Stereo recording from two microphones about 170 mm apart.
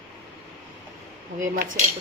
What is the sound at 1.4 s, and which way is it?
Speech, 50° right (ahead or behind).